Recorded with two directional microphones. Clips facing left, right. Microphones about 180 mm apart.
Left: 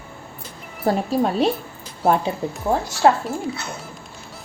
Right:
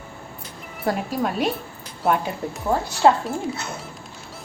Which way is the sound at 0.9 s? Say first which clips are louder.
Left 4 dB; 30° left (ahead or behind).